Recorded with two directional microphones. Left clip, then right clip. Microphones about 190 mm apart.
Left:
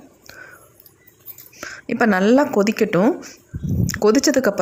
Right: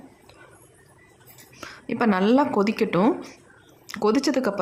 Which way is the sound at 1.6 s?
20° left (ahead or behind).